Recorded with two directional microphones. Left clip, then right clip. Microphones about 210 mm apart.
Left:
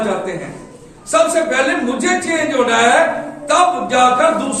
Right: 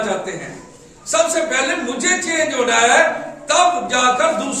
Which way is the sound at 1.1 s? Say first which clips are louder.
Left 3 dB; 10° right (ahead or behind).